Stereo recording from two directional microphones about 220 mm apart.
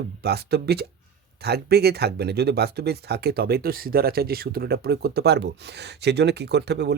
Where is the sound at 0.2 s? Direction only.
45° right (ahead or behind).